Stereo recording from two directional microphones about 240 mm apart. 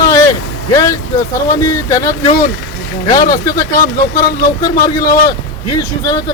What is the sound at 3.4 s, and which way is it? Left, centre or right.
Speech, centre.